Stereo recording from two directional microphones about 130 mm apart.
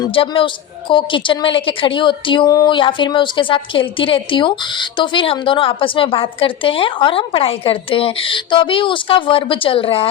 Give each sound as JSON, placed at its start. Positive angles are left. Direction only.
{"t": 0.0, "sound": "a woman's voice", "side_deg": 45}